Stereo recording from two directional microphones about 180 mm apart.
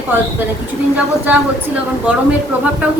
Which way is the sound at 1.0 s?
10° right (ahead or behind).